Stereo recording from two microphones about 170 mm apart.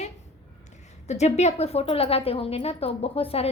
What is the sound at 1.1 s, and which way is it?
A woman's voice, 40° left (ahead or behind).